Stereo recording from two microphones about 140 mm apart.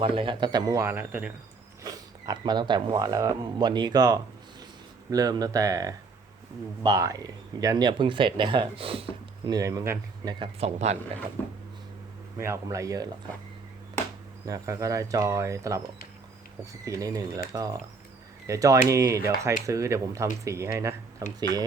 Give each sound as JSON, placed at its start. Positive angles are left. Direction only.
{"t": 0.0, "sound": "speech", "side_deg": -40}
{"t": 1.8, "sound": "speech", "side_deg": -25}
{"t": 9.5, "sound": "speech", "side_deg": -25}
{"t": 10.4, "sound": "speech", "side_deg": -50}
{"t": 12.4, "sound": "speech", "side_deg": -20}
{"t": 14.4, "sound": "speech", "side_deg": -25}
{"t": 16.8, "sound": "speech", "side_deg": -25}